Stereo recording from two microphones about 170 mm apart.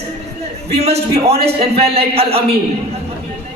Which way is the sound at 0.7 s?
40° right (ahead or behind).